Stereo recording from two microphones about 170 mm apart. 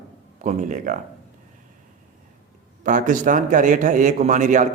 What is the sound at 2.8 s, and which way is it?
A man's voice, 50° right (ahead or behind).